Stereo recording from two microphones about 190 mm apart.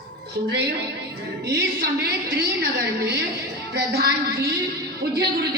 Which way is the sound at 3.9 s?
60° right (ahead or behind).